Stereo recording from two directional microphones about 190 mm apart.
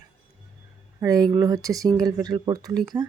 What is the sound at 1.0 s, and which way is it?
Speech, 20° right (ahead or behind).